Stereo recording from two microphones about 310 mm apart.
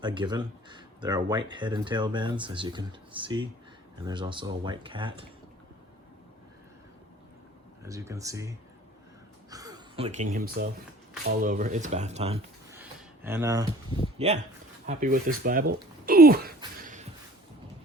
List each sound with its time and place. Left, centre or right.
0.0 s speech: centre
7.9 s speech: centre
9.5 s a sound: centre
10.3 s speech: right
12.7 s a sound: centre
14.2 s speech: right